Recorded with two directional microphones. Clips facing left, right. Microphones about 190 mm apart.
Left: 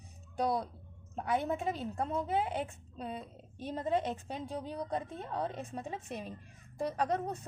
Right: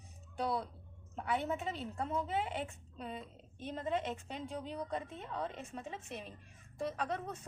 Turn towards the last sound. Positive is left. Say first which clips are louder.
# left 6 dB
turn(degrees=40)  # may be behind; listen again after turning